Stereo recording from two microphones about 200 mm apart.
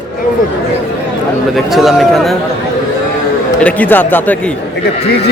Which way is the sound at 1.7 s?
Centre (ahead or behind).